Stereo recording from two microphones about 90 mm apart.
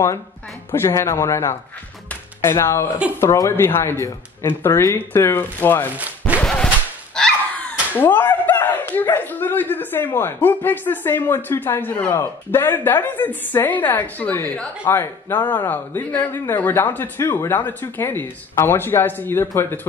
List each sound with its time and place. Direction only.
0.7 s speech: 30° left (ahead or behind)
2.0 s music: 25° left (ahead or behind)
3.2 s speech: 35° left (ahead or behind)
5.9 s a sound: 15° right (ahead or behind)
6.4 s whip: 10° left (ahead or behind)
7.2 s dog: 10° left (ahead or behind)
12.1 s speech: 25° left (ahead or behind)